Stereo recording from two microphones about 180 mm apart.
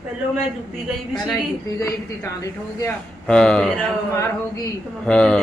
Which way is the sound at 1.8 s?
15° left (ahead or behind).